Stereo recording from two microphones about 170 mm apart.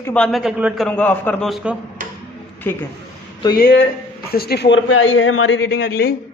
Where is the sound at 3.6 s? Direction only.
70° left (ahead or behind).